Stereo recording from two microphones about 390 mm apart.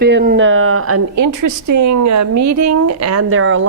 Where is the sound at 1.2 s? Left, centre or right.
Right.